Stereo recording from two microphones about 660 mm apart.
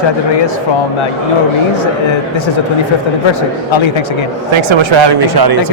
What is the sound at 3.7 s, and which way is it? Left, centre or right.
Speech, left.